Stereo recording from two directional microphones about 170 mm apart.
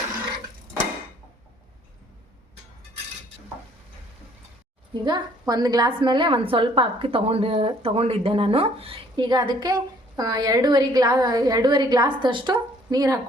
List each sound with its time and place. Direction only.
5.0 s a woman's voice: 25° right (ahead or behind)